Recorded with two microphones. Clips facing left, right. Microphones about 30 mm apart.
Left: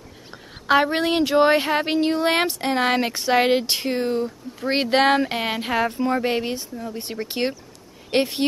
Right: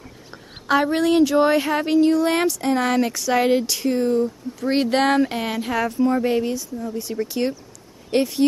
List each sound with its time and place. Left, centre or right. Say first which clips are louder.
0.7 s speech: even; left